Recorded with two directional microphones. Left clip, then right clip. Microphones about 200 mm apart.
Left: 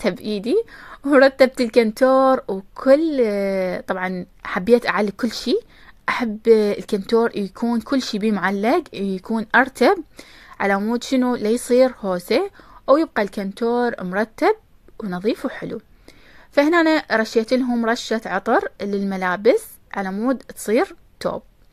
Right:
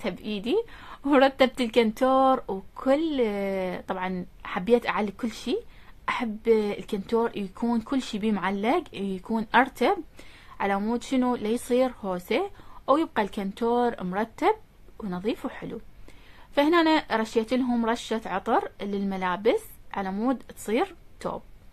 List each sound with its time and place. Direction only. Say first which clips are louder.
0.0 s speech: left 9 dB; 30° left (ahead or behind)
7.6 s speech: left 4 dB; 10° left (ahead or behind)
7.9 s speech: left 7 dB; 25° left (ahead or behind)